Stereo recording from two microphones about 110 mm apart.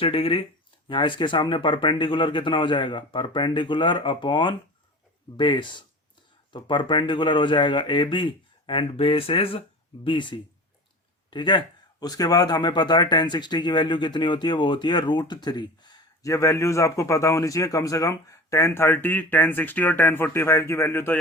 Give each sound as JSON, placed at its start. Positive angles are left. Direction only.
{"t": 0.0, "sound": "a man's voice", "side_deg": 55}